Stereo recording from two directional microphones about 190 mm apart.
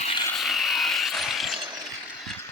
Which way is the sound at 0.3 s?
Centre (ahead or behind).